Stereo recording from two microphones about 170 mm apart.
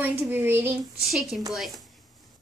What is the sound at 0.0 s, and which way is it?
Speech, 10° right (ahead or behind).